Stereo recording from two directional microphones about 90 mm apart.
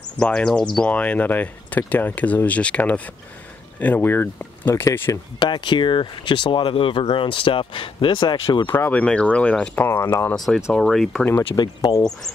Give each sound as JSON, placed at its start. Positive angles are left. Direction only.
{"t": 0.2, "sound": "speech", "side_deg": 10}
{"t": 5.1, "sound": "speech", "side_deg": 35}
{"t": 5.4, "sound": "speech", "side_deg": 60}
{"t": 8.6, "sound": "speech", "side_deg": 25}
{"t": 9.0, "sound": "speech", "side_deg": 10}
{"t": 9.8, "sound": "speech", "side_deg": 25}
{"t": 10.3, "sound": "speech", "side_deg": 5}
{"t": 11.6, "sound": "speech", "side_deg": 50}